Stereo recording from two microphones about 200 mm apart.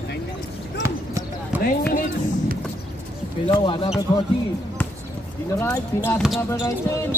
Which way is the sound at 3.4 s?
25° left (ahead or behind).